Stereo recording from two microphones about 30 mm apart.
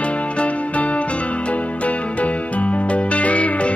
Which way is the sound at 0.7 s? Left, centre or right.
Left.